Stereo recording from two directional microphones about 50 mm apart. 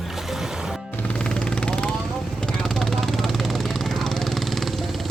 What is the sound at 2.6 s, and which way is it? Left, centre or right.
Vehicle, centre.